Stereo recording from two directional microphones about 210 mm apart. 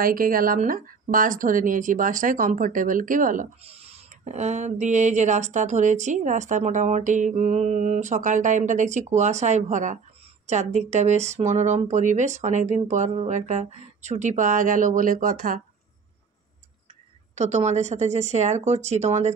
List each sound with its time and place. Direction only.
0.0 s speech: 40° right (ahead or behind)
17.4 s speech: 35° right (ahead or behind)